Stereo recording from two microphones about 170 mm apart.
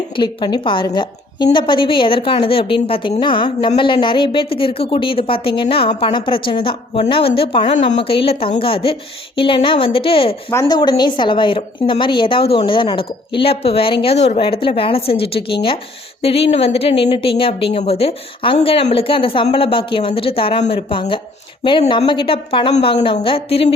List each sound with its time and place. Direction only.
0.2 s a woman's voice: 25° left (ahead or behind)
10.5 s a woman's voice: 15° left (ahead or behind); by 23.7 s 35° left (ahead or behind)